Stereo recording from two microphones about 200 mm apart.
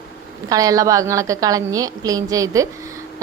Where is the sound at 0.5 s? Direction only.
15° right (ahead or behind).